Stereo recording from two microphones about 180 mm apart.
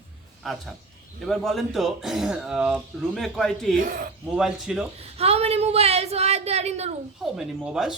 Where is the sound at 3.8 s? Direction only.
50° right (ahead or behind).